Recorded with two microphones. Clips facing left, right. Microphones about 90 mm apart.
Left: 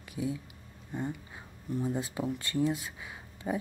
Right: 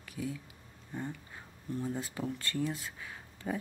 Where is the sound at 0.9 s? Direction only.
15° left (ahead or behind).